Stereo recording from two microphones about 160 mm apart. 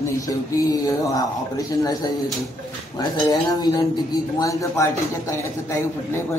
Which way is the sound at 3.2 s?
25° left (ahead or behind).